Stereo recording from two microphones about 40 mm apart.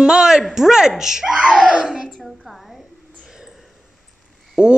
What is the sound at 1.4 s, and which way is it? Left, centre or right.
Speech, right.